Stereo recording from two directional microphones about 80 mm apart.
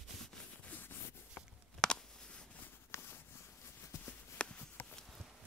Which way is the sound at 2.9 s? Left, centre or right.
Left.